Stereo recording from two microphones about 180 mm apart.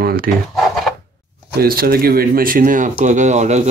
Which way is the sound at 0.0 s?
55° right (ahead or behind).